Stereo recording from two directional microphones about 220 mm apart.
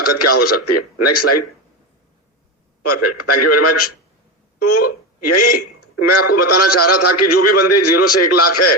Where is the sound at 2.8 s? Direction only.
90° left.